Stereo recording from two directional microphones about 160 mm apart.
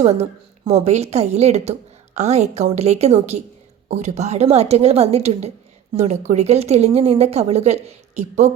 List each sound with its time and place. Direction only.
0.0 s a woman's voice: 45° right (ahead or behind)